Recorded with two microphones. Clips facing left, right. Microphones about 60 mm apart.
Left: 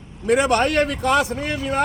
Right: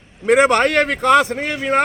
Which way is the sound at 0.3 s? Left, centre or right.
Right.